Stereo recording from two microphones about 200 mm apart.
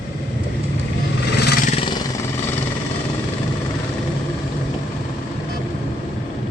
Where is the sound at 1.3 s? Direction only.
55° left (ahead or behind).